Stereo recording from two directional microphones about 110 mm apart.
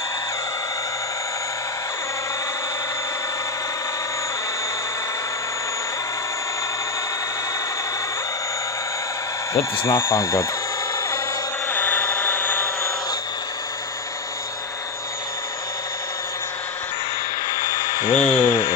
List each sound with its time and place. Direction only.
9.8 s speech: 25° left (ahead or behind)
11.7 s vehicle: 15° left (ahead or behind)
17.5 s a sound: 45° left (ahead or behind)
18.1 s speech: 70° left (ahead or behind); by 18.8 s 50° left (ahead or behind)